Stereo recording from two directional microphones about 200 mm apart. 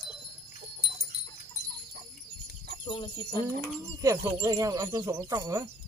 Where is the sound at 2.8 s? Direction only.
25° left (ahead or behind).